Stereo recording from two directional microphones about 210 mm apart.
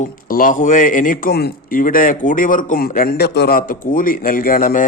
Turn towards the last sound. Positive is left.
turn(degrees=40)  # may be behind; listen again after turning